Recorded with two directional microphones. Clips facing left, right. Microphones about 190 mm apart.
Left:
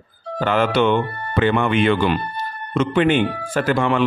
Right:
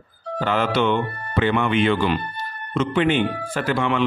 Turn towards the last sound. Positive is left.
turn(degrees=45)  # may be behind; listen again after turning